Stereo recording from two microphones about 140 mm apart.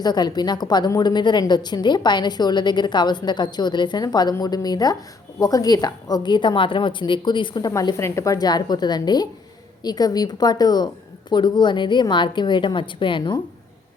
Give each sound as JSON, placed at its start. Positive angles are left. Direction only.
{"t": 0.0, "sound": "a woman's voice", "side_deg": 30}
{"t": 7.7, "sound": "a woman's voice", "side_deg": 20}